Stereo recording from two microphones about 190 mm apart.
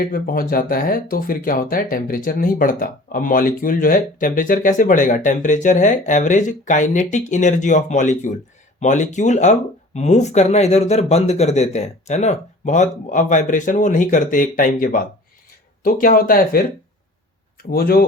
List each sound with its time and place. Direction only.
0.0 s speech: 50° left (ahead or behind)
17.7 s speech: 55° left (ahead or behind)